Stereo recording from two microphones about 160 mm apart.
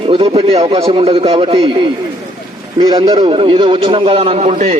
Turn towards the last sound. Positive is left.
turn(degrees=-45)  # may be behind; listen again after turning